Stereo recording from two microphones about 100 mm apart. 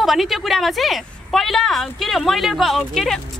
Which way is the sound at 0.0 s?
Centre (ahead or behind).